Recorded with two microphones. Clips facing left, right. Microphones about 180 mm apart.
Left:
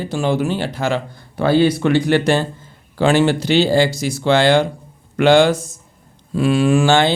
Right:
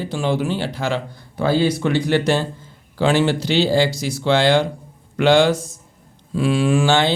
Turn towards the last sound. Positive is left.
turn(degrees=50)  # may be behind; listen again after turning